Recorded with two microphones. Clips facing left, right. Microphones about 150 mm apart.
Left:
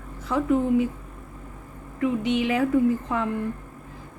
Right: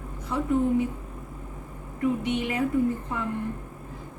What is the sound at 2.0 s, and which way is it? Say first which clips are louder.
A woman's voice: left 3 dB; 90° left.